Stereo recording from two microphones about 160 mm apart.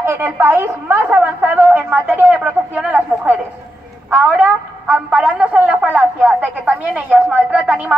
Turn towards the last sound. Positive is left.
turn(degrees=-10)  # may be behind; listen again after turning